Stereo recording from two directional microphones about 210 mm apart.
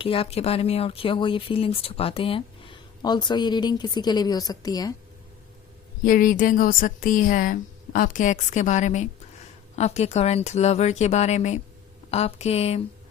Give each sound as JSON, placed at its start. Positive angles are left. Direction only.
{"t": 0.0, "sound": "speech", "side_deg": 25}
{"t": 6.0, "sound": "speech", "side_deg": 40}